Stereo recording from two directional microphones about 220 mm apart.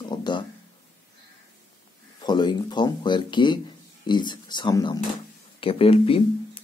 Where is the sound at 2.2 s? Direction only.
20° left (ahead or behind).